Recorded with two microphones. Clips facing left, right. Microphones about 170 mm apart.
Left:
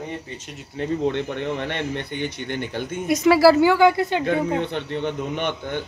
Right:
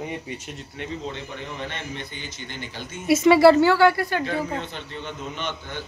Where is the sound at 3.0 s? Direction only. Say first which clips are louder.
Right 1 dB; centre (ahead or behind).